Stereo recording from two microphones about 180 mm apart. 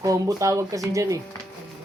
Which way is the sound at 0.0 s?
20° right (ahead or behind).